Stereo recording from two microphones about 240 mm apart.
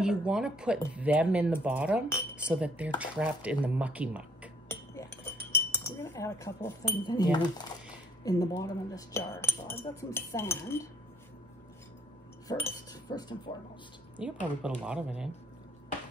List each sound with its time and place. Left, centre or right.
0.0 s speech: centre
4.6 s speech: centre
12.4 s cutlery: centre
14.1 s speech: centre